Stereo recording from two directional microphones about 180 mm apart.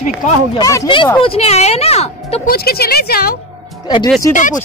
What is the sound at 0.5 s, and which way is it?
A woman's voice, 20° left (ahead or behind).